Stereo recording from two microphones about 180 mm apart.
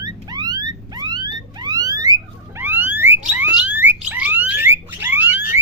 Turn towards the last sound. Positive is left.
turn(degrees=-10)  # may be behind; listen again after turning